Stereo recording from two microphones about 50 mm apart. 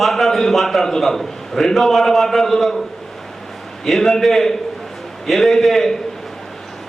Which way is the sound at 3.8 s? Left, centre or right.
Centre.